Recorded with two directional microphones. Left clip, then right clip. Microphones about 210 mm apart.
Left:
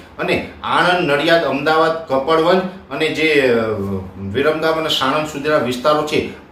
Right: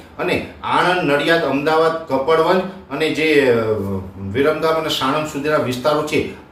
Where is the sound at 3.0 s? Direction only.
5° left (ahead or behind).